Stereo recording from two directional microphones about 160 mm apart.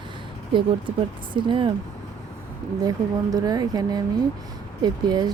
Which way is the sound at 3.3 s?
25° right (ahead or behind).